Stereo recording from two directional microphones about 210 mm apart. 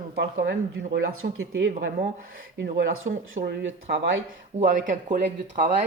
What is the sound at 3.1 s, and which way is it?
Speech, 50° right (ahead or behind).